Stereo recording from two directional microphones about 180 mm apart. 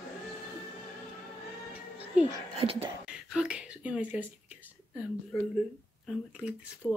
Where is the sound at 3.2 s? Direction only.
5° right (ahead or behind).